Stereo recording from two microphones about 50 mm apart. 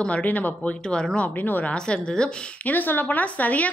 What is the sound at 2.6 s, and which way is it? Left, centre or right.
A woman's voice, left.